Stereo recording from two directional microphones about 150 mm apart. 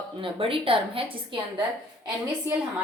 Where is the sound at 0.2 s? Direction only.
35° right (ahead or behind).